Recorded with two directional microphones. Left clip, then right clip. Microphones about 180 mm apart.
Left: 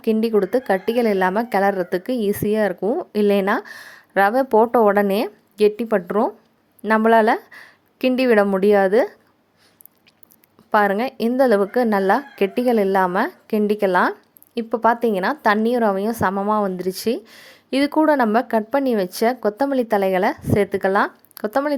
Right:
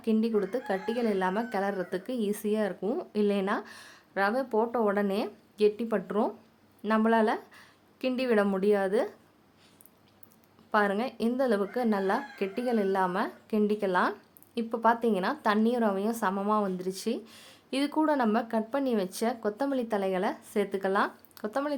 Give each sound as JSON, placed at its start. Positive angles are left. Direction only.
{"t": 0.0, "sound": "speech", "side_deg": 40}
{"t": 2.8, "sound": "speech", "side_deg": 25}
{"t": 3.1, "sound": "speech", "side_deg": 40}
{"t": 10.7, "sound": "speech", "side_deg": 40}